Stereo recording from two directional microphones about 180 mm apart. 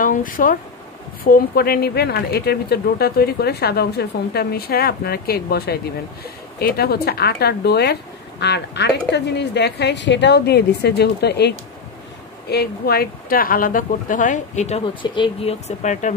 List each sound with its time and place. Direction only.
0.0 s a woman's voice: 50° left (ahead or behind)
15.0 s speech: 25° left (ahead or behind)
15.8 s speech: 40° left (ahead or behind)